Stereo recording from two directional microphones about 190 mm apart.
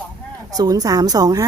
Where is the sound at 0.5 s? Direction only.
20° right (ahead or behind).